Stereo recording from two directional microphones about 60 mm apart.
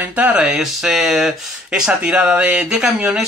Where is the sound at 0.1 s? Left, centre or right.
Right.